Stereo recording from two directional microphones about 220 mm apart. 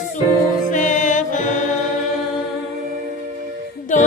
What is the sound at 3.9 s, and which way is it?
Music, 35° left (ahead or behind).